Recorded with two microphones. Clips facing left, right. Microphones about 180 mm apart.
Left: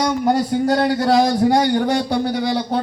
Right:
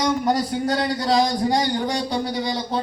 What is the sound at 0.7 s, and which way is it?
A man's voice, 60° left (ahead or behind).